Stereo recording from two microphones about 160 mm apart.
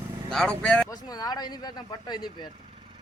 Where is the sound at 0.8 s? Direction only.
25° left (ahead or behind).